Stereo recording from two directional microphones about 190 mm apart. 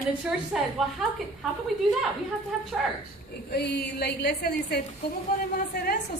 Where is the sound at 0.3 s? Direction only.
5° right (ahead or behind).